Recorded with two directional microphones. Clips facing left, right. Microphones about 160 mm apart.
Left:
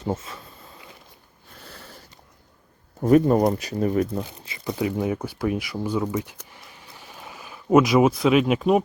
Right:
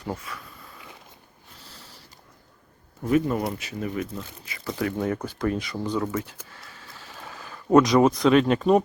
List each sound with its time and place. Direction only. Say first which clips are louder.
0.0 s speech: left 5 dB; 25° left (ahead or behind)
1.5 s sniff: left 6 dB; 55° left (ahead or behind)
3.0 s speech: left 6 dB; 40° left (ahead or behind)
4.4 s speech: even; 20° left (ahead or behind)
6.4 s a sound: even; 15° left (ahead or behind)